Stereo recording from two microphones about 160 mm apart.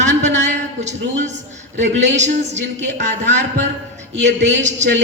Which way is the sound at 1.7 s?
45° right (ahead or behind).